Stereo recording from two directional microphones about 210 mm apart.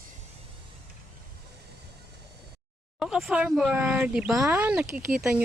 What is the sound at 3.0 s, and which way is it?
A woman's voice, centre (ahead or behind).